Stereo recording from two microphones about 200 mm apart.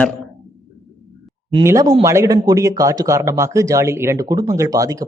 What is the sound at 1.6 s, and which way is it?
Speech, 15° right (ahead or behind).